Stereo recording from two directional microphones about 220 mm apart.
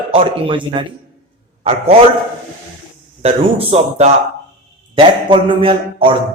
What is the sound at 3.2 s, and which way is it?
A man's voice, 25° right (ahead or behind).